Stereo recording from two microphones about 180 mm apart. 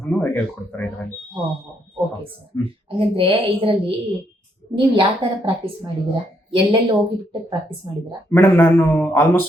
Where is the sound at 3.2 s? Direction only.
30° right (ahead or behind).